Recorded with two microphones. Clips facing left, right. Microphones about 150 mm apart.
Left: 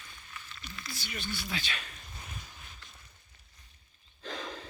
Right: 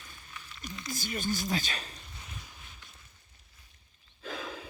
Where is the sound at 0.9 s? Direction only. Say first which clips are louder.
Right 7 dB; 45° right (ahead or behind).